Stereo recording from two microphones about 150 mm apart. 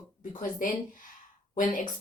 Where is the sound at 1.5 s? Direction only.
60° left (ahead or behind).